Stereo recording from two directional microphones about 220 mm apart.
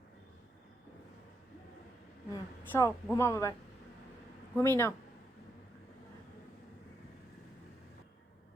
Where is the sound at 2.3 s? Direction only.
15° left (ahead or behind).